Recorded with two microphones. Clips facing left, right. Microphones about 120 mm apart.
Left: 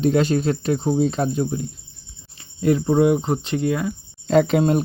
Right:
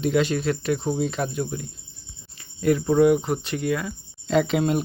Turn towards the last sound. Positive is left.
turn(degrees=40)  # may be behind; listen again after turning